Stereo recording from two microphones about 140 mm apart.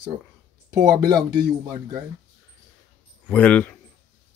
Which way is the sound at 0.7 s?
30° right (ahead or behind).